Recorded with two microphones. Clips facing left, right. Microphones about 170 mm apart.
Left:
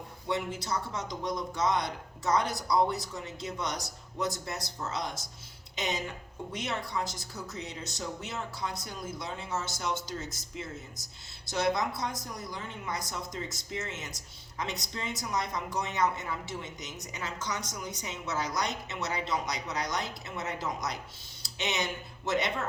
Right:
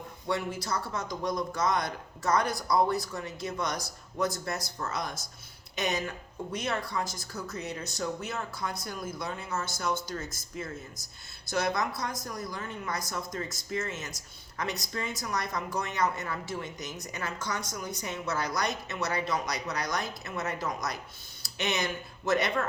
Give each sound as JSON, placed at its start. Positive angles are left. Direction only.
{"t": 0.3, "sound": "a man's voice", "side_deg": 20}
{"t": 9.6, "sound": "a woman's voice", "side_deg": -50}
{"t": 11.5, "sound": "a man's voice", "side_deg": 25}
{"t": 17.6, "sound": "a woman's voice", "side_deg": -50}
{"t": 18.1, "sound": "a man's voice", "side_deg": 20}
{"t": 21.4, "sound": "a sound", "side_deg": 20}
{"t": 22.3, "sound": "a man's voice", "side_deg": 25}